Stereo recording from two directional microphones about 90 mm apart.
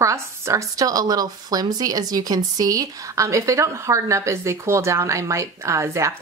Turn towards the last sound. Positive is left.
turn(degrees=-30)  # may be behind; listen again after turning